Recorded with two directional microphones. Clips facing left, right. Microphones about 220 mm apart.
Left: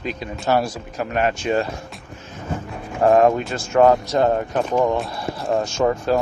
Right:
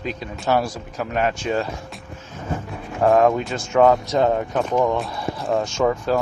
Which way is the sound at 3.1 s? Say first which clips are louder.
Left 1 dB; centre (ahead or behind).